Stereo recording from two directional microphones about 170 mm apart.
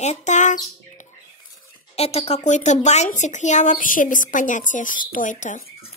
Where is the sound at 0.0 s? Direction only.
45° left (ahead or behind).